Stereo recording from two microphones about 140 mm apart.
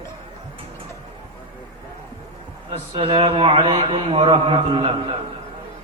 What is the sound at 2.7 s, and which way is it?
A man's voice, 40° right (ahead or behind).